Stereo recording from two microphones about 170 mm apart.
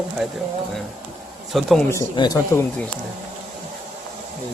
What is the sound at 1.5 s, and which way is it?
Speech, centre (ahead or behind).